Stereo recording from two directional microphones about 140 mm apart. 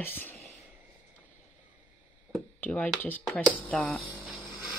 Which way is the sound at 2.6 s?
10° left (ahead or behind).